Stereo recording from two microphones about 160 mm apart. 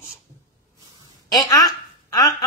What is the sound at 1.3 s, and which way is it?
A woman's voice, 20° left (ahead or behind).